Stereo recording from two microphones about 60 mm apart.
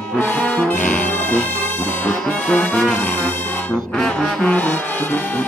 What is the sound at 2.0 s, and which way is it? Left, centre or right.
Music, left.